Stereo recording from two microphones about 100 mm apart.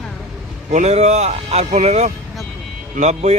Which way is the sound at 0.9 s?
90° right.